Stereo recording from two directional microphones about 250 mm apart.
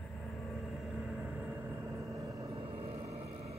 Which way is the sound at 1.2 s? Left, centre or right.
Centre.